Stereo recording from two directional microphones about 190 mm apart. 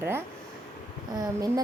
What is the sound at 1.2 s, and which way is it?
Speech, 20° right (ahead or behind).